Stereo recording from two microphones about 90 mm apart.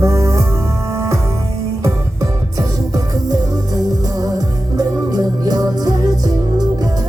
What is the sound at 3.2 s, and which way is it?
Music, 45° right (ahead or behind).